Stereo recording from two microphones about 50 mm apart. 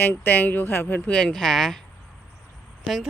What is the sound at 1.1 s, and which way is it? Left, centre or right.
Speech, centre.